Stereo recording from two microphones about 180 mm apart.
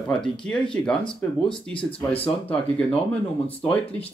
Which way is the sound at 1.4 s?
30° left (ahead or behind).